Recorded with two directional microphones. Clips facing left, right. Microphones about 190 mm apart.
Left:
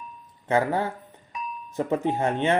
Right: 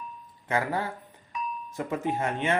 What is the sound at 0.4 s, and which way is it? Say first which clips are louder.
Speech: left 5 dB; 30° left (ahead or behind).